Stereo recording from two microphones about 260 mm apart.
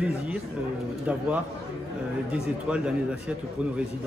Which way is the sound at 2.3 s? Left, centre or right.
Centre.